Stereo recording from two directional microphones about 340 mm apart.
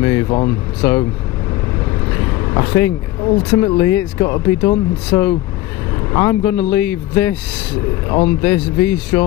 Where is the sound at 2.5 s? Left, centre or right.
Centre.